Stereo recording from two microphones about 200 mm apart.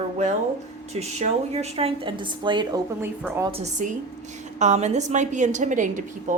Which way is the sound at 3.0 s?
10° right (ahead or behind).